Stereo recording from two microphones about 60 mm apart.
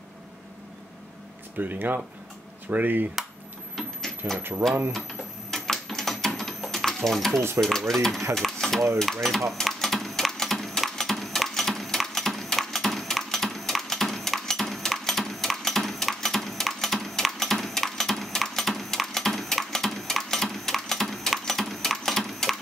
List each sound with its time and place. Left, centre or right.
1.6 s speech: right
4.4 s speech: right
5.5 s a sound: centre
7.1 s speech: centre
8.4 s cash register: centre
8.9 s speech: centre
9.5 s a sound: centre